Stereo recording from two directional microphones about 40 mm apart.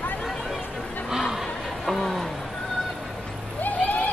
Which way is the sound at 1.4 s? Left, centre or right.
Centre.